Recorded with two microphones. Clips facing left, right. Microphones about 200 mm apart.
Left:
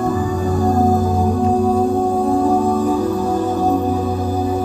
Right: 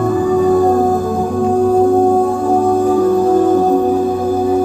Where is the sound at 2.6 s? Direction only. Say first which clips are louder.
Right 5 dB; 50° right (ahead or behind).